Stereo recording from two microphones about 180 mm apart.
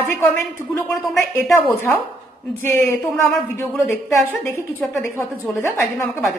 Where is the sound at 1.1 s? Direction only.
15° left (ahead or behind).